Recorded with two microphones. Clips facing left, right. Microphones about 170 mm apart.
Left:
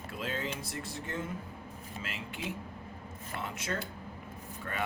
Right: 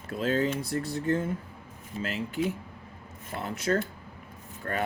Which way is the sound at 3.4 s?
35° right (ahead or behind).